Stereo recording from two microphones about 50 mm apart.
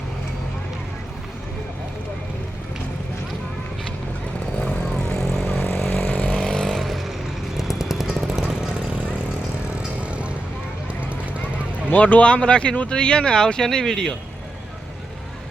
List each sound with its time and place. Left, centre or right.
4.6 s vehicle: left
5.2 s vehicle: centre
5.5 s vehicle: left
6.3 s vehicle: centre
7.5 s jackhammer: centre
10.0 s vehicle: right
11.5 s speech: left; by 14.2 s centre